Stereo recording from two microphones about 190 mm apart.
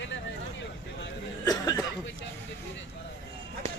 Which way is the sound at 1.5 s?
20° left (ahead or behind).